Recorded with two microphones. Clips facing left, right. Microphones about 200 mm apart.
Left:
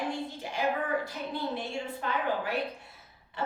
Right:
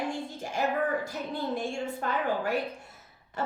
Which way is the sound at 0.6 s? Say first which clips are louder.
Right 2 dB; 45° right (ahead or behind).